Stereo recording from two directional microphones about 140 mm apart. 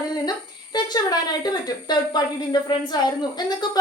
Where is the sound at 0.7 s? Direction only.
30° left (ahead or behind).